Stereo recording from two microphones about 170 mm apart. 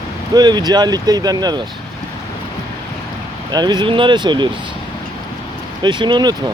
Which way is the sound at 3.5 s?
25° right (ahead or behind).